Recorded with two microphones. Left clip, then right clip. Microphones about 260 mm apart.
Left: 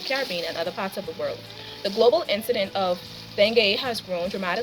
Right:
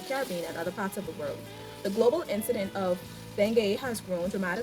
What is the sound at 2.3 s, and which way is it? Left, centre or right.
A woman's voice, centre.